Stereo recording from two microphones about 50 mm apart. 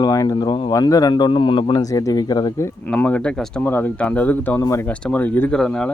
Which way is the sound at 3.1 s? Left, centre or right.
Left.